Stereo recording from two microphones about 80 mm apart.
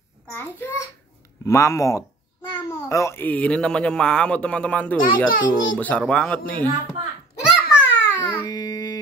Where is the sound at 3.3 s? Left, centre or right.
Centre.